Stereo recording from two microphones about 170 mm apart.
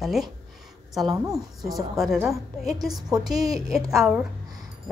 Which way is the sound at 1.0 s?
20° right (ahead or behind).